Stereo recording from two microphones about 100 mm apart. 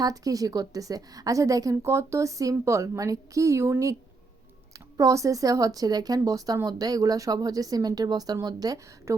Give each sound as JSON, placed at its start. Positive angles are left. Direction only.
{"t": 0.0, "sound": "a woman's voice", "side_deg": -35}